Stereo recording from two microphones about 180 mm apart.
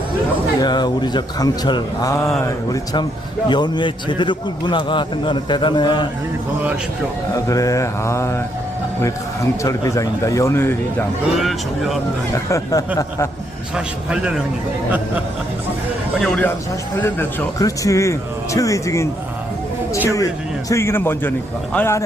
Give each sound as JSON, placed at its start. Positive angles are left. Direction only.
{"t": 0.6, "sound": "a man's voice", "side_deg": 25}
{"t": 7.3, "sound": "speech", "side_deg": 20}
{"t": 11.3, "sound": "a man's voice", "side_deg": 0}
{"t": 12.3, "sound": "speech", "side_deg": 15}
{"t": 13.7, "sound": "a man's voice", "side_deg": -5}
{"t": 16.2, "sound": "a man's voice", "side_deg": 5}
{"t": 17.0, "sound": "speech", "side_deg": 15}
{"t": 20.7, "sound": "speech", "side_deg": 15}